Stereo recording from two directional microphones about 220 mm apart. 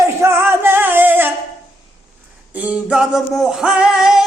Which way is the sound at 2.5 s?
5° right (ahead or behind).